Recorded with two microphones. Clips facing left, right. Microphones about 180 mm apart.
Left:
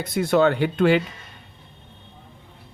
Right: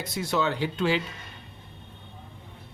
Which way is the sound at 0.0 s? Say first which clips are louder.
Left 9 dB; 55° left (ahead or behind).